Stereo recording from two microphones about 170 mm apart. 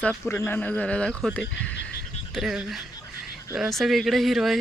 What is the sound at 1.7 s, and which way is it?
Frog, 90° left.